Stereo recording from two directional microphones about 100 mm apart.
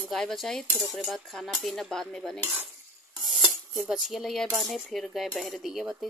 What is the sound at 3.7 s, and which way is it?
Speech, centre (ahead or behind).